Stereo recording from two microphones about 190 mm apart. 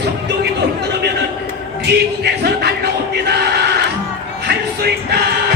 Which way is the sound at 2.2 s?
60° right (ahead or behind).